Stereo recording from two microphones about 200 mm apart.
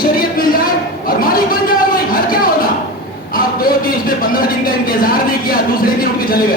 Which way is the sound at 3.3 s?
45° left (ahead or behind).